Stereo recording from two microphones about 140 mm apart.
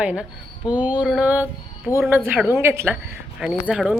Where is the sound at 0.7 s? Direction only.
10° right (ahead or behind).